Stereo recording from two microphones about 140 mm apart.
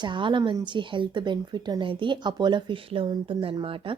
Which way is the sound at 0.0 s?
35° right (ahead or behind).